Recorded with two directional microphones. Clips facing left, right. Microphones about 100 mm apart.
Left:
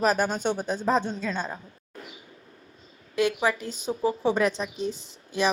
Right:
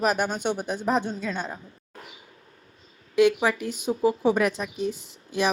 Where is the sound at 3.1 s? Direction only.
15° right (ahead or behind).